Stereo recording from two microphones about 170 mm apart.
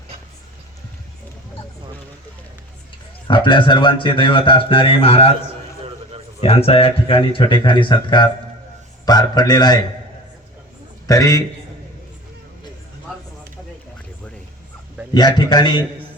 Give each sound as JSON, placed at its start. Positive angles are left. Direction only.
{"t": 3.2, "sound": "speech", "side_deg": 30}
{"t": 5.8, "sound": "a sound", "side_deg": -35}
{"t": 6.4, "sound": "speech", "side_deg": 35}
{"t": 11.0, "sound": "a man's voice", "side_deg": 20}
{"t": 15.1, "sound": "speech", "side_deg": 25}